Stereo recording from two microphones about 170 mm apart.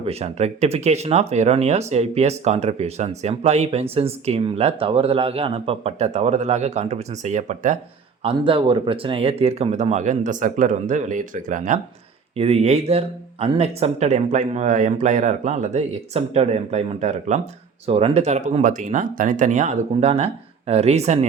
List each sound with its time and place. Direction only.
0.0 s speech: 40° right (ahead or behind)
8.2 s speech: 30° right (ahead or behind); by 11.8 s 50° right (ahead or behind)
12.4 s speech: 40° right (ahead or behind)